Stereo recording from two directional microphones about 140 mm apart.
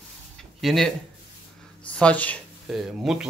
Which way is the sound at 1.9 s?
10° left (ahead or behind).